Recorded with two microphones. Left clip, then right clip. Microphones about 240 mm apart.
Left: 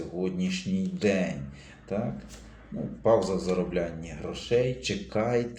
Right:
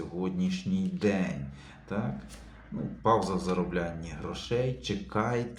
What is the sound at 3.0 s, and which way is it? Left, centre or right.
Speech, right.